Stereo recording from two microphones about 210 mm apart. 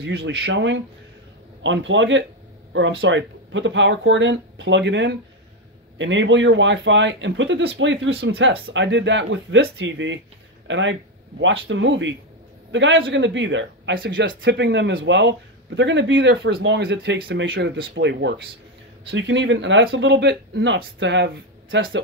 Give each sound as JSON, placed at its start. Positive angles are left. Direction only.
{"t": 0.3, "sound": "a man's voice", "side_deg": -60}